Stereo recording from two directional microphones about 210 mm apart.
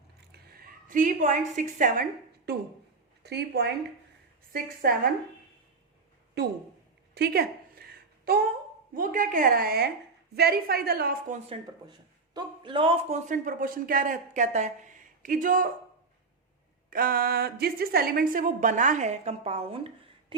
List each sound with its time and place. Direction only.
0.3 s a woman's voice: 45° right (ahead or behind)
3.2 s a woman's voice: 50° right (ahead or behind)
7.1 s a sound: 50° right (ahead or behind)
9.0 s a woman's voice: 40° right (ahead or behind)
11.4 s speech: 20° right (ahead or behind); by 15.7 s 40° right (ahead or behind)
16.9 s speech: 40° right (ahead or behind); by 19.9 s 25° right (ahead or behind)